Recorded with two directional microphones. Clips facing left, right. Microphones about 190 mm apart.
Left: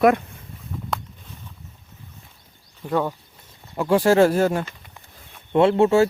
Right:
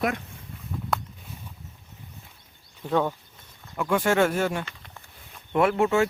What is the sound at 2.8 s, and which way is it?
Speech, 5° left (ahead or behind).